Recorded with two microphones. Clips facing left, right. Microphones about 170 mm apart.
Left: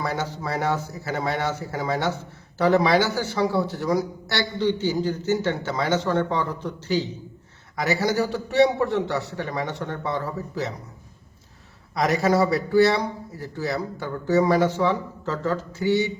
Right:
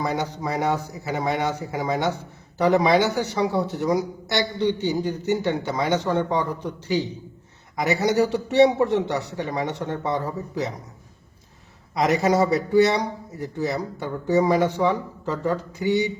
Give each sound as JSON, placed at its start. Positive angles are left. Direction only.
{"t": 0.0, "sound": "a man's voice", "side_deg": -15}
{"t": 12.2, "sound": "a man's voice", "side_deg": -20}